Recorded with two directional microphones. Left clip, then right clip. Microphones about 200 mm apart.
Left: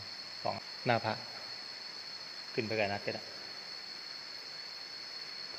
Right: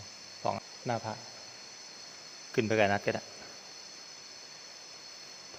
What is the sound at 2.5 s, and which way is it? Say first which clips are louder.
Speech: right 7 dB; 45° right (ahead or behind).